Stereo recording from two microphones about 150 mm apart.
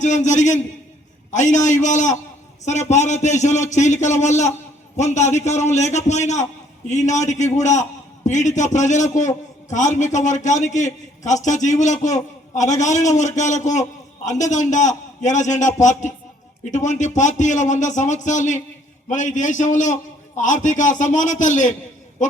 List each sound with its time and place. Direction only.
0.0 s a man's voice: 55° left (ahead or behind)